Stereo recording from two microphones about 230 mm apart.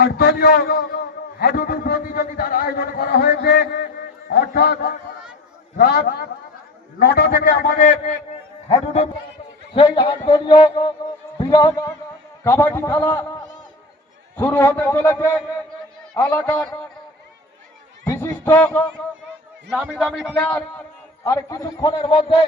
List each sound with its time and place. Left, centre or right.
0.0 s a man's voice: left
4.3 s music: left
5.7 s a man's voice: left; by 16.7 s centre
18.0 s a sound: centre
19.7 s a man's voice: centre; by 22.4 s left